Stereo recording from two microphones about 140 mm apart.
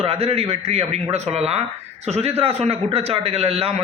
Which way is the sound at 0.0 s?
45° right (ahead or behind).